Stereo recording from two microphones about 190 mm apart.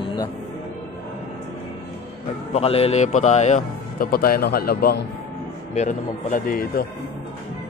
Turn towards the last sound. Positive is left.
turn(degrees=50)  # may be behind; listen again after turning